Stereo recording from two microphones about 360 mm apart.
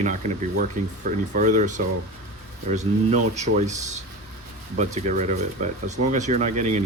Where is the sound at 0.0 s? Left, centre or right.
Right.